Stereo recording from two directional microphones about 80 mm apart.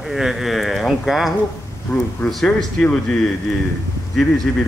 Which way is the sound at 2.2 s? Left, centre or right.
Left.